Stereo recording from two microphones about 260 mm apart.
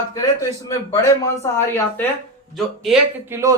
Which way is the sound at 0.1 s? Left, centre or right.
Centre.